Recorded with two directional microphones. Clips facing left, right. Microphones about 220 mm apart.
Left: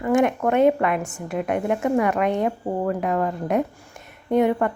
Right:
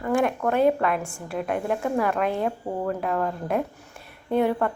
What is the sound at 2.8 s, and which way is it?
Speech, 10° left (ahead or behind).